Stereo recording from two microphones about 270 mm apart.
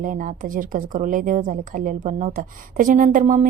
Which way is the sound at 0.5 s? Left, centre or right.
Right.